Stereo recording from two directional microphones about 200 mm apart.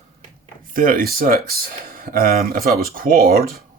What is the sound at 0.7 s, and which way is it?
Speech, 45° right (ahead or behind).